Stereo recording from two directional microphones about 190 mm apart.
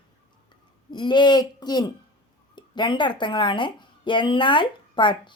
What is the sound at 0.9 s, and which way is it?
A woman's voice, 25° left (ahead or behind).